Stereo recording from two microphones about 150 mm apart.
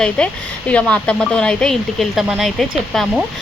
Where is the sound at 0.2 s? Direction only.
5° left (ahead or behind).